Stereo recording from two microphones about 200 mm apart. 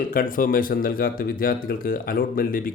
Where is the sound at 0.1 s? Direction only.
45° left (ahead or behind).